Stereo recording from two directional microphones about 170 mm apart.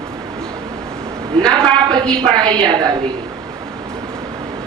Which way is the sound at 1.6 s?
25° right (ahead or behind).